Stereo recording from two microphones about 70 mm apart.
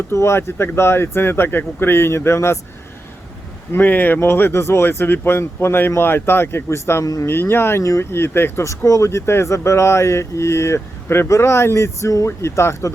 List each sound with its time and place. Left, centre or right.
0.1 s speech: left
3.7 s speech: left
7.0 s speech: left
7.3 s speech: left